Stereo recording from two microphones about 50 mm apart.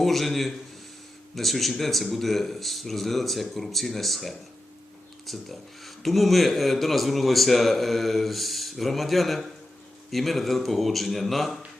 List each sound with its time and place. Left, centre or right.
0.0 s speech: centre